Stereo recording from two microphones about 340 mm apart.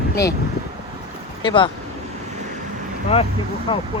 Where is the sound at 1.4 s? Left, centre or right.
Centre.